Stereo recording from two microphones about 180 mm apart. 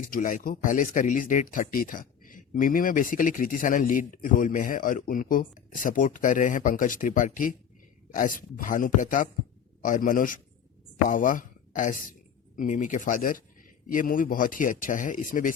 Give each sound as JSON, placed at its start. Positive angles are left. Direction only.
{"t": 0.1, "sound": "speech", "side_deg": 50}